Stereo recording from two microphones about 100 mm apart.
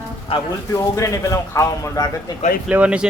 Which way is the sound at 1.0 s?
30° left (ahead or behind).